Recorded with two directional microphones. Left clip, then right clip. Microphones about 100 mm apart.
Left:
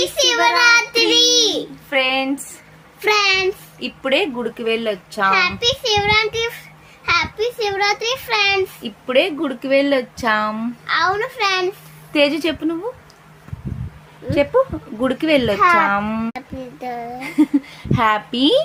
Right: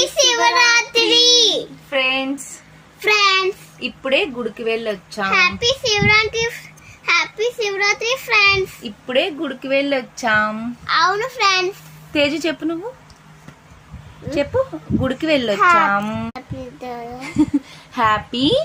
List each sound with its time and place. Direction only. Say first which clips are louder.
0.0 s a sound: right 1 dB; 5° left (ahead or behind)
1.9 s a sound: left 1 dB; 45° left (ahead or behind)
3.0 s a sound: right 1 dB; 15° left (ahead or behind)
3.8 s speech: even; 45° left (ahead or behind)
5.3 s a child's voice: right 2 dB; 15° left (ahead or behind)
8.8 s speech: left 2 dB; 45° left (ahead or behind)
10.8 s a child's voice: right 1 dB; 5° left (ahead or behind)
12.1 s a woman's voice: left 2 dB; 30° left (ahead or behind)
14.3 s a woman's voice: left 3 dB; 30° left (ahead or behind)
15.5 s a child's voice: right 2 dB; centre (ahead or behind)
15.9 s a woman's voice: even; 35° left (ahead or behind)